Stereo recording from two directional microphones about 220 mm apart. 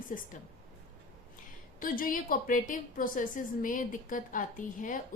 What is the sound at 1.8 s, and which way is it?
A woman's voice, 40° left (ahead or behind).